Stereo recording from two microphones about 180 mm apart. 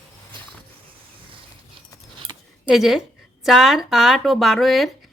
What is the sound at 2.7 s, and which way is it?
Speech, centre (ahead or behind).